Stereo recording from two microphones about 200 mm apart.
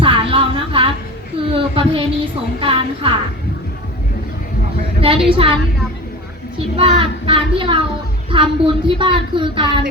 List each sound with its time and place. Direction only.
0.0 s a sound: 25° right (ahead or behind)
1.5 s child singing: 25° right (ahead or behind)
2.6 s a woman's voice: 25° right (ahead or behind)
4.9 s a sound: 25° right (ahead or behind)
5.3 s speech: 25° right (ahead or behind)
6.7 s speech: 25° right (ahead or behind)